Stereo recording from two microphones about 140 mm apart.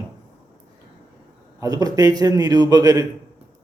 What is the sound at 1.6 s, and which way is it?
Speech, 25° right (ahead or behind).